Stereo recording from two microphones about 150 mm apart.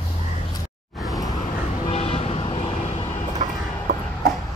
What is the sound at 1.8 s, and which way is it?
Vehicle, 40° left (ahead or behind).